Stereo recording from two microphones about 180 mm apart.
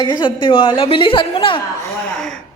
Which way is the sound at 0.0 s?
25° left (ahead or behind).